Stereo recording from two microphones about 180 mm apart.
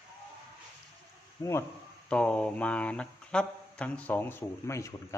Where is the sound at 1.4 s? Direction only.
15° left (ahead or behind).